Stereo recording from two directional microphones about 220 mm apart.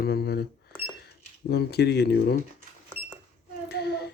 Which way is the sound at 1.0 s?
45° left (ahead or behind).